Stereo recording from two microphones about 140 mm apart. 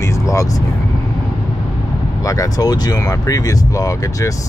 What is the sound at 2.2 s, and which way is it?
Speech, 25° left (ahead or behind).